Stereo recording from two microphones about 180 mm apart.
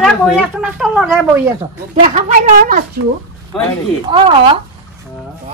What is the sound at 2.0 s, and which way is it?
Speech, 40° right (ahead or behind).